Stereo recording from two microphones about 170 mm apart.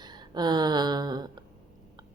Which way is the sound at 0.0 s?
25° right (ahead or behind).